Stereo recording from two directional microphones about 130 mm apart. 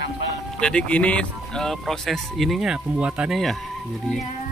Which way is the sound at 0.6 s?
10° left (ahead or behind).